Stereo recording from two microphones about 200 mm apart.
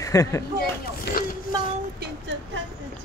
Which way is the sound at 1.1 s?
55° left (ahead or behind).